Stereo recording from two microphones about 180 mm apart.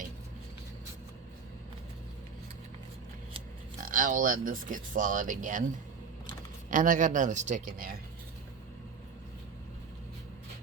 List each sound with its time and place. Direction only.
3.8 s speech: 50° right (ahead or behind)
6.7 s speech: 45° right (ahead or behind)